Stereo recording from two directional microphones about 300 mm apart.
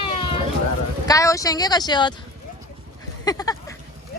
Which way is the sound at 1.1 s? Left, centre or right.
Centre.